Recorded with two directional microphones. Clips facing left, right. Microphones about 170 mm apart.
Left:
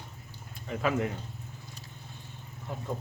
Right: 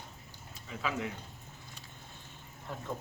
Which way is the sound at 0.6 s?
55° left (ahead or behind).